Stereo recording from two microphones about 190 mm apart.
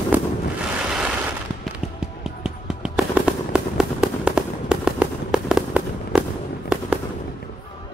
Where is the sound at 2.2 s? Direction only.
5° right (ahead or behind).